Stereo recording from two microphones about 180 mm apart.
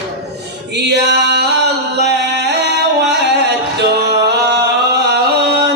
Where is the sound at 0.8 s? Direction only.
70° right (ahead or behind).